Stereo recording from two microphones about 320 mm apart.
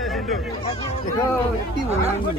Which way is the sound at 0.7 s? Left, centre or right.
Centre.